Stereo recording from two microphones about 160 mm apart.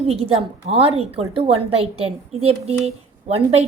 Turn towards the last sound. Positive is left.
turn(degrees=-40)  # may be behind; listen again after turning